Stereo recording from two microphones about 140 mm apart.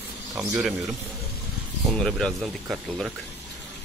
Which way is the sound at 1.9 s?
5° left (ahead or behind).